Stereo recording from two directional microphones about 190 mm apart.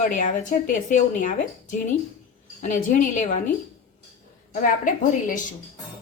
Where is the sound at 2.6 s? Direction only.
40° left (ahead or behind).